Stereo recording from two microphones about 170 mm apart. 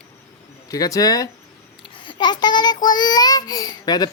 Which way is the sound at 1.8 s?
30° left (ahead or behind).